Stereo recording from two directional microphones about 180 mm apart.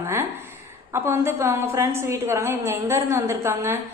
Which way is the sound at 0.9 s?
15° right (ahead or behind).